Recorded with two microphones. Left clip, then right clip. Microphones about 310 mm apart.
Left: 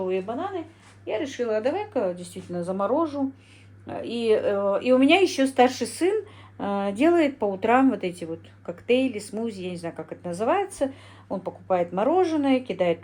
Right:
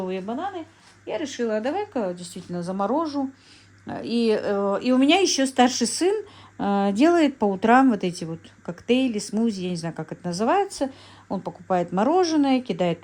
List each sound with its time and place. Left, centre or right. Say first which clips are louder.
0.0 s speech: left 1 dB; right